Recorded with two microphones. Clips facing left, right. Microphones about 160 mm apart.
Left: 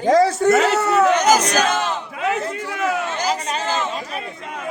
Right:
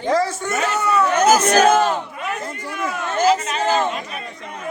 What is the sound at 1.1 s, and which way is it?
Speech, 50° right (ahead or behind).